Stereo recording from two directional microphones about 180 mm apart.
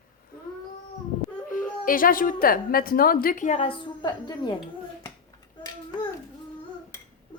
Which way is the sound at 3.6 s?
30° left (ahead or behind).